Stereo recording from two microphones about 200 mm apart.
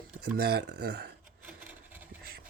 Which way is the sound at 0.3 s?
55° right (ahead or behind).